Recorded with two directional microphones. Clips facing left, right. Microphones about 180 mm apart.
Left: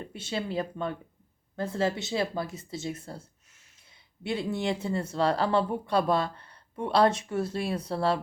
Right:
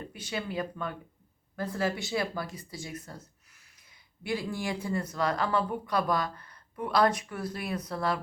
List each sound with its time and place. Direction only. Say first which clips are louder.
0.1 s speech: left 4 dB; 25° left (ahead or behind)